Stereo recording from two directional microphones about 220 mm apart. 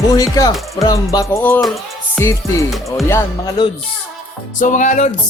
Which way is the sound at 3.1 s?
20° left (ahead or behind).